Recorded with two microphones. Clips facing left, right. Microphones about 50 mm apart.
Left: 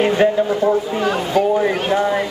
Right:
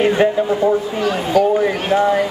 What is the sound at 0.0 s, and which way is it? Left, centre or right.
Speech, centre.